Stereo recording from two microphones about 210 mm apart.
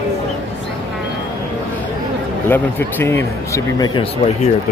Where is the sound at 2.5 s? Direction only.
10° left (ahead or behind).